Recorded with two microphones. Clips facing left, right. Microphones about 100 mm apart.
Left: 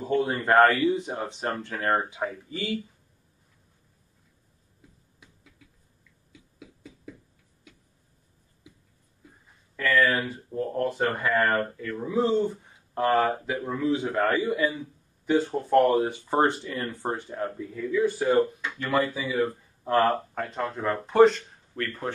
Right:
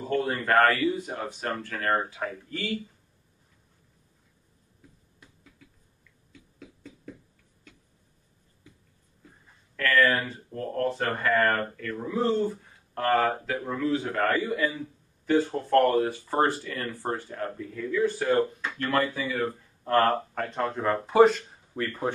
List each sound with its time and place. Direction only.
0.1 s speech: 20° left (ahead or behind)
2.5 s speech: centre (ahead or behind)
5.2 s finger snapping: centre (ahead or behind)
6.3 s a sound: 5° left (ahead or behind)
9.8 s speech: 5° left (ahead or behind)
14.3 s speech: 20° left (ahead or behind)
15.4 s speech: 5° left (ahead or behind)
15.8 s speech: 20° left (ahead or behind)
17.6 s speech: 5° left (ahead or behind); by 22.1 s 15° right (ahead or behind)